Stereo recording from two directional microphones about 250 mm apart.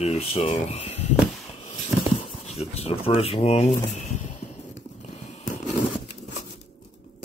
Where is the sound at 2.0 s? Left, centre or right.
Left.